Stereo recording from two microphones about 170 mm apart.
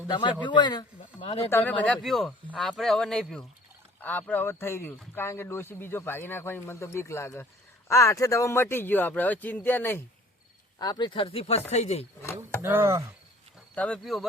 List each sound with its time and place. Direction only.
0.1 s speech: 25° left (ahead or behind)
1.5 s speech: 10° left (ahead or behind)
10.8 s speech: 25° left (ahead or behind); by 12.0 s 40° left (ahead or behind)
12.6 s speech: 15° right (ahead or behind)
13.7 s speech: 5° left (ahead or behind)